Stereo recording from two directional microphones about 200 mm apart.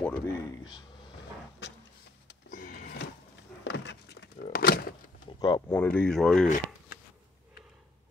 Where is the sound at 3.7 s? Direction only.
60° left (ahead or behind).